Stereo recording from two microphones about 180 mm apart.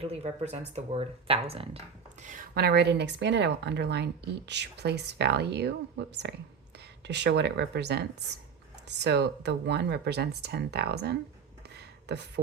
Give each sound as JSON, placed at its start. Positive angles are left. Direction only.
{"t": 0.0, "sound": "speech", "side_deg": -35}
{"t": 2.2, "sound": "a woman's voice", "side_deg": -50}